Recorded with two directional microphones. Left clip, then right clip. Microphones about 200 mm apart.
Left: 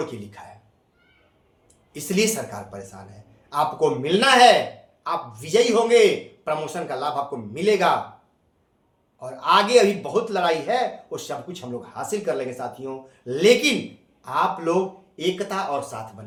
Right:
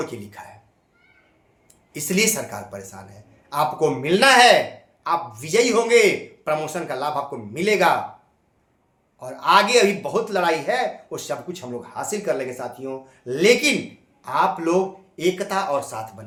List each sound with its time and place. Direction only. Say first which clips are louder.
0.0 s a man's voice: right 1 dB; 20° right (ahead or behind)
1.9 s a man's voice: right 1 dB; 25° right (ahead or behind)
9.1 s a man's voice: right 2 dB; 25° right (ahead or behind)